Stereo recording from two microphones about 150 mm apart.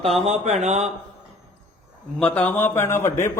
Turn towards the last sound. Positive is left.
turn(degrees=20)  # may be behind; listen again after turning